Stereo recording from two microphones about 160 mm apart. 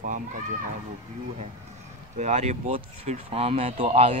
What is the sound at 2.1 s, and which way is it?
Speech, 45° right (ahead or behind).